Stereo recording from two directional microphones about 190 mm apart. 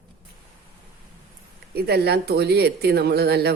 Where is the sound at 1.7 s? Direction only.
55° right (ahead or behind).